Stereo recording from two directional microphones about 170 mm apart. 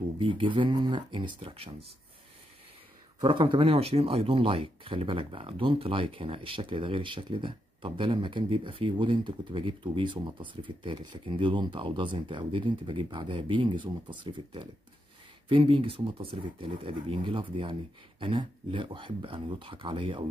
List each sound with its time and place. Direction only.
0.2 s speech: 30° right (ahead or behind)
3.2 s speech: 30° right (ahead or behind)